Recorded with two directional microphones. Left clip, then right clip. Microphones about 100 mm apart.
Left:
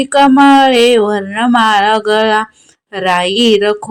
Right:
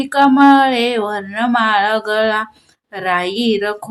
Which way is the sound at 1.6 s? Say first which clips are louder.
Left 5 dB; 45° left (ahead or behind).